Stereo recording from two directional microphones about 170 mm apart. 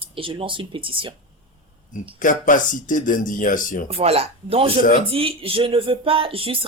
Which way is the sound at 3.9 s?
35° right (ahead or behind).